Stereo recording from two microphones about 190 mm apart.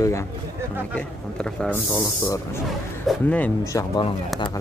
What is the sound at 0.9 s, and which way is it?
Speech, 5° left (ahead or behind).